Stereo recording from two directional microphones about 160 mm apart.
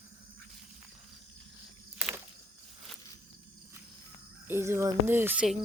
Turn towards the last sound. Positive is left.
turn(degrees=-5)  # may be behind; listen again after turning